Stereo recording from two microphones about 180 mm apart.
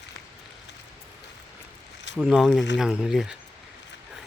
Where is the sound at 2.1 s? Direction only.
Centre (ahead or behind).